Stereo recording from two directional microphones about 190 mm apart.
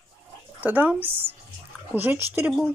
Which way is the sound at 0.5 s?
10° right (ahead or behind).